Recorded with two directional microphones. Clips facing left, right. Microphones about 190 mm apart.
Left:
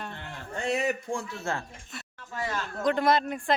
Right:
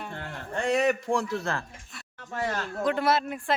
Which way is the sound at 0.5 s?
75° right (ahead or behind).